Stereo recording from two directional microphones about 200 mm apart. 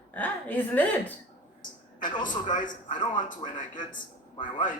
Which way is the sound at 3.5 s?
40° left (ahead or behind).